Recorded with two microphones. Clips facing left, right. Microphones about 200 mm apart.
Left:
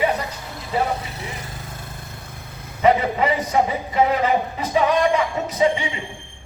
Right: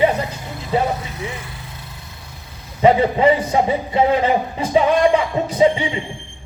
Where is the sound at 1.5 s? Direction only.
45° left (ahead or behind).